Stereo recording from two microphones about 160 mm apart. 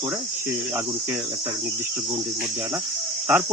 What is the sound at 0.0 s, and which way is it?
Cricket, 15° right (ahead or behind).